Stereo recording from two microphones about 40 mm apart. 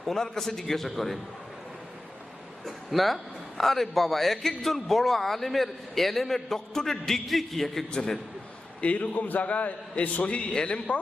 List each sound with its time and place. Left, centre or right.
0.0 s a man's voice: centre
2.6 s a sound: centre
3.6 s a man's voice: centre
7.9 s a man's voice: centre
8.8 s a man's voice: left
10.5 s speech: left